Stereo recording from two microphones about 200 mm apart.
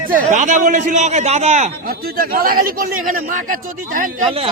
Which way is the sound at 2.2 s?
45° right (ahead or behind).